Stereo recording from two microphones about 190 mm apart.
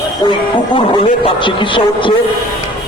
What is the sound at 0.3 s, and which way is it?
Speech, 25° left (ahead or behind).